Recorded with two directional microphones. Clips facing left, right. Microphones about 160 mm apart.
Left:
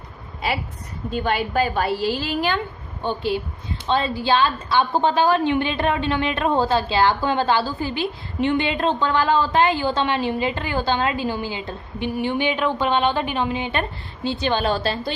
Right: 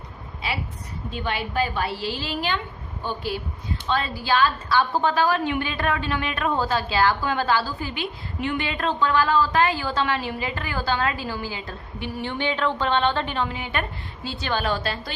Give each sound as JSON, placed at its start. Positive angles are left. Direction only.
{"t": 1.1, "sound": "a woman's voice", "side_deg": 45}
{"t": 3.0, "sound": "a woman's voice", "side_deg": 25}